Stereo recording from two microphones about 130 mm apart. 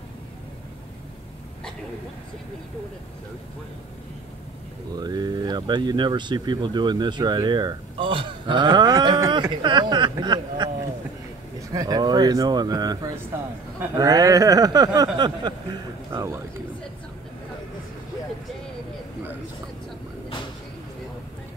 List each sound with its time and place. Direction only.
4.9 s speech: 30° right (ahead or behind)
11.7 s speech: 30° right (ahead or behind)
16.1 s speech: 20° right (ahead or behind)